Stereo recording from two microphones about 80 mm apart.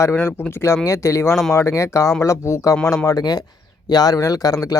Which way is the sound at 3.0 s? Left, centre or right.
Left.